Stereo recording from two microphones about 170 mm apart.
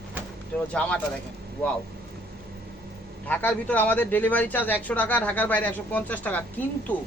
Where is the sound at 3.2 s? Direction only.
10° left (ahead or behind).